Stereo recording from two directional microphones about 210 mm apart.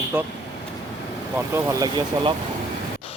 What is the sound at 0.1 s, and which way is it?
Speech, 10° right (ahead or behind).